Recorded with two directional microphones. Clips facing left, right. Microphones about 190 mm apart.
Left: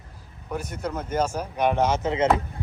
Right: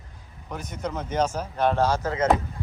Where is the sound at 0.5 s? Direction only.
10° left (ahead or behind).